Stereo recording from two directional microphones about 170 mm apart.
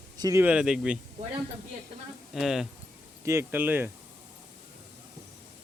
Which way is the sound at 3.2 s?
15° right (ahead or behind).